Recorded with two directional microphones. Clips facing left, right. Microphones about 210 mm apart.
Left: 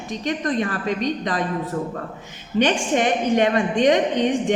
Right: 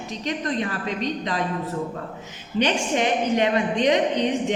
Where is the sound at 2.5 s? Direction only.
50° left (ahead or behind).